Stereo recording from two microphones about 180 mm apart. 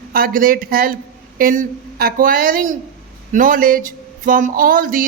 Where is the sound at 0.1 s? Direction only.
50° right (ahead or behind).